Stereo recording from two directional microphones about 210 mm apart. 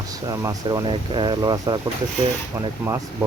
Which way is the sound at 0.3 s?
15° right (ahead or behind).